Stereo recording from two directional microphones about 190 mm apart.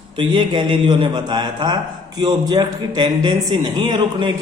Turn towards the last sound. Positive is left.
turn(degrees=-25)  # may be behind; listen again after turning